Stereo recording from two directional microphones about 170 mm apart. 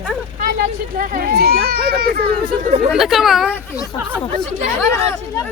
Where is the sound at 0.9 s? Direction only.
60° right (ahead or behind).